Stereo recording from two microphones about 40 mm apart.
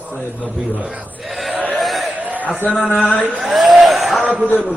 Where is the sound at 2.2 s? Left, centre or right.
Right.